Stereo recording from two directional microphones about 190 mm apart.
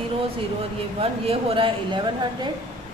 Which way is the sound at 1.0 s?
30° right (ahead or behind).